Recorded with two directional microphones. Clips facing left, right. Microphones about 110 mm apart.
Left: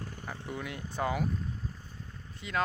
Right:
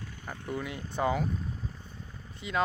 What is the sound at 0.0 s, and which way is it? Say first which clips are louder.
Vehicle: left 3 dB; 45° left (ahead or behind).